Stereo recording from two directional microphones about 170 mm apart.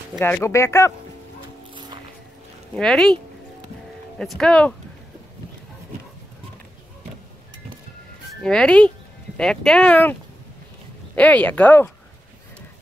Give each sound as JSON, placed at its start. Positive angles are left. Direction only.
{"t": 0.2, "sound": "speech", "side_deg": 15}
{"t": 2.7, "sound": "speech", "side_deg": 5}
{"t": 4.2, "sound": "speech", "side_deg": 5}
{"t": 8.4, "sound": "speech", "side_deg": 5}
{"t": 11.1, "sound": "speech", "side_deg": 10}